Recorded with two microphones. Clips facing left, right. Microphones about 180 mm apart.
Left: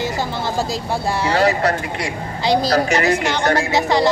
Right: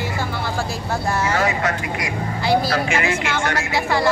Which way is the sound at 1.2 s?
35° left (ahead or behind).